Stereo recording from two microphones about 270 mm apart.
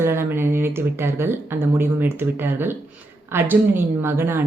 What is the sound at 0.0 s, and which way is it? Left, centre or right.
A woman's voice, centre.